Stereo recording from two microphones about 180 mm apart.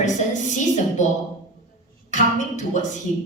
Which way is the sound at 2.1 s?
45° left (ahead or behind).